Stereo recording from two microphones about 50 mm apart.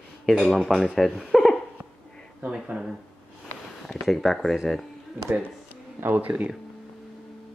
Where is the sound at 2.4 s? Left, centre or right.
Centre.